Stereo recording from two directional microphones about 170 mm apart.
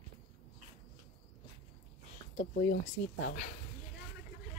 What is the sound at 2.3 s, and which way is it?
Speech, 50° left (ahead or behind).